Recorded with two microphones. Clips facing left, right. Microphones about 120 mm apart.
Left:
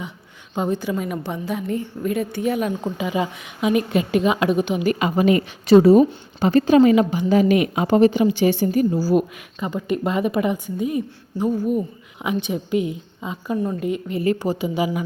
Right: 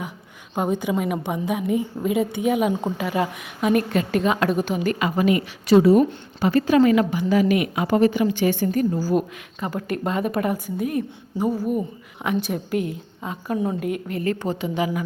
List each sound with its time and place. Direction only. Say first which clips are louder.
0.5 s a woman's voice: even; 15° right (ahead or behind)
3.0 s a woman's voice: even; centre (ahead or behind)
4.9 s a woman's voice: left 3 dB; 20° left (ahead or behind); by 11.9 s 10° right (ahead or behind)
12.4 s a woman's voice: left 5 dB; centre (ahead or behind)
13.6 s a woman's voice: right 1 dB; 10° right (ahead or behind)
14.3 s a woman's voice: left 4 dB; 10° left (ahead or behind)